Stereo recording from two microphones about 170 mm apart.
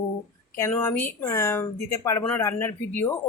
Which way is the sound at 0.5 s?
15° left (ahead or behind).